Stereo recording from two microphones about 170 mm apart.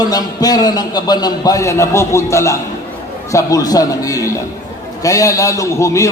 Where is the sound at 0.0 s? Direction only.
20° left (ahead or behind).